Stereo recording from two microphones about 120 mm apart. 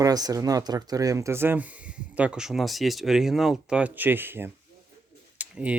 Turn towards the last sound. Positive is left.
turn(degrees=-10)  # may be behind; listen again after turning